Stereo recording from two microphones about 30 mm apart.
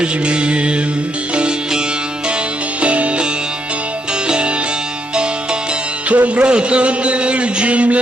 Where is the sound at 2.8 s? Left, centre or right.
Right.